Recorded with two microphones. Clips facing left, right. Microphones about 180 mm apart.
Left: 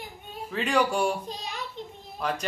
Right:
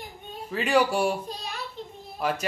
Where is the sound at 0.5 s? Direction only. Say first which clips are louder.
Right 2 dB; 5° right (ahead or behind).